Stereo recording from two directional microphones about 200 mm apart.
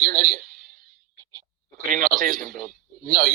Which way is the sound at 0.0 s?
45° right (ahead or behind).